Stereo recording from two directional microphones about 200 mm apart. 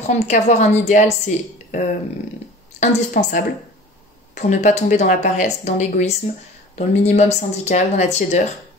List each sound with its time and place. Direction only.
0.0 s speech: 35° left (ahead or behind)